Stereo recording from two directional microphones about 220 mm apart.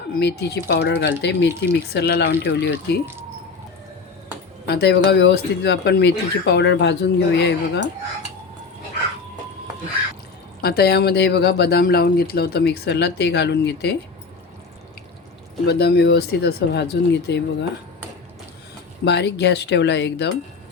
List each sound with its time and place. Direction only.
0.1 s speech: 50° left (ahead or behind)
4.6 s speech: 50° left (ahead or behind)
10.6 s speech: 45° left (ahead or behind)
15.6 s speech: 50° left (ahead or behind)
19.0 s speech: 50° left (ahead or behind)